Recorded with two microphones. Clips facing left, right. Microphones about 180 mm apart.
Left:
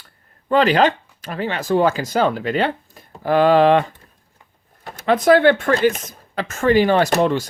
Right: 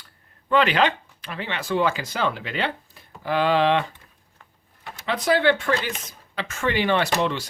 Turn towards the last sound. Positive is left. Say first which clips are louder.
# left 6 dB
turn(degrees=45)  # may be behind; listen again after turning